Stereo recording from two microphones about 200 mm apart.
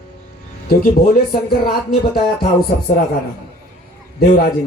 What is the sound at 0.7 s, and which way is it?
Speech, 50° left (ahead or behind).